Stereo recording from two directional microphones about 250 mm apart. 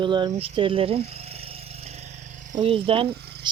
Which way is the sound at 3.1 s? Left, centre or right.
Right.